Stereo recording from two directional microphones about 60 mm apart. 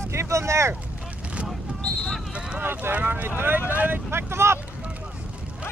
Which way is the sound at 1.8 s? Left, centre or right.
Left.